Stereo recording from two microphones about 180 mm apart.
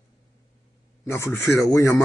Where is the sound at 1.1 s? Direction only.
15° left (ahead or behind).